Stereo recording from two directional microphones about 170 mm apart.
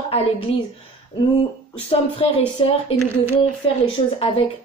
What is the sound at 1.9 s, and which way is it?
Speech, 30° left (ahead or behind).